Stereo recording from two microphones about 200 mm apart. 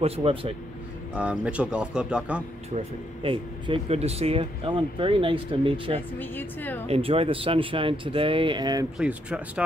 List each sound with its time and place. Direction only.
0.0 s speech: 30° right (ahead or behind)
1.1 s speech: 5° right (ahead or behind)
2.7 s speech: 25° right (ahead or behind)
5.9 s a woman's voice: 10° left (ahead or behind)
6.9 s speech: 30° right (ahead or behind)
8.9 s speech: 5° right (ahead or behind)